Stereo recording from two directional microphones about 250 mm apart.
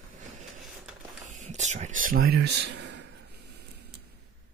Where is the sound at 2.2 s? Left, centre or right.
Right.